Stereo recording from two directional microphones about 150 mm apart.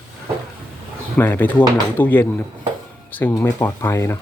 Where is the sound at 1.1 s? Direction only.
15° left (ahead or behind).